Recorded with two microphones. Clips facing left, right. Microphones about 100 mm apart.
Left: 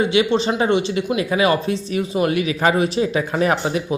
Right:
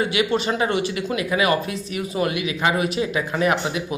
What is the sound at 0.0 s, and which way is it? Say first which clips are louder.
Speech: left 4 dB; 25° left (ahead or behind).